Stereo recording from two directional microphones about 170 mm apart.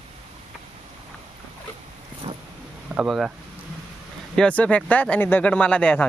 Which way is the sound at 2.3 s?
35° right (ahead or behind).